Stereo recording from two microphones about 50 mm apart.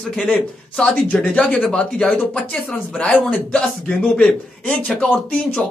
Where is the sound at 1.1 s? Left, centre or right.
Left.